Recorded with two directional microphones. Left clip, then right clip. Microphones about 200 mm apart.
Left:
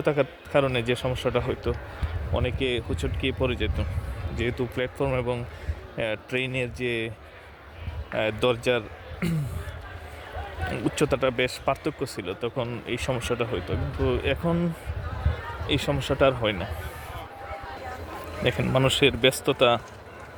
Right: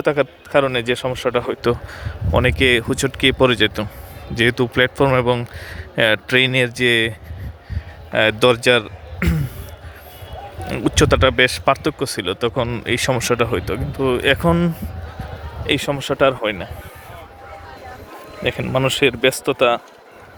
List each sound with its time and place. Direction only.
0.0 s speech: 25° right (ahead or behind)
8.1 s speech: 20° right (ahead or behind)
10.7 s speech: 20° right (ahead or behind)
18.4 s speech: 10° right (ahead or behind)